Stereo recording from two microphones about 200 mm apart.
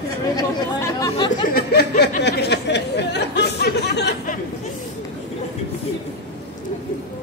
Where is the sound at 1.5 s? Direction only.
55° left (ahead or behind).